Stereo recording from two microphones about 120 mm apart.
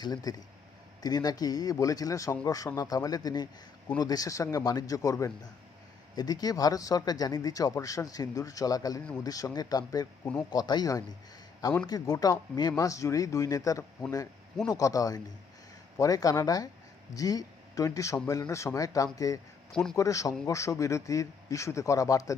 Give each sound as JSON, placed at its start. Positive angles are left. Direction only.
{"t": 0.0, "sound": "speech", "side_deg": 35}
{"t": 19.7, "sound": "a man's voice", "side_deg": 5}
{"t": 20.0, "sound": "speech", "side_deg": 25}